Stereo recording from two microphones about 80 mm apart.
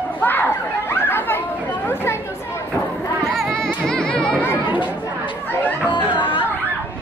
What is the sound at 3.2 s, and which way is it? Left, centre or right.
Music, centre.